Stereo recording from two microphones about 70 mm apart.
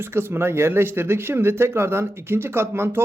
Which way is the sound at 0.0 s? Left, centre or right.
Right.